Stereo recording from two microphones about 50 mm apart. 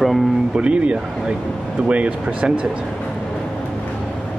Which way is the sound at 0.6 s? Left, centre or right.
Right.